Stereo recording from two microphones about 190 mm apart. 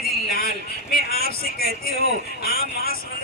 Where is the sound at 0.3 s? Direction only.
50° left (ahead or behind).